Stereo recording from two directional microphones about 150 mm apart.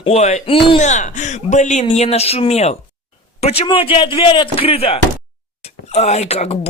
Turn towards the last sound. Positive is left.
turn(degrees=45)  # may be behind; listen again after turning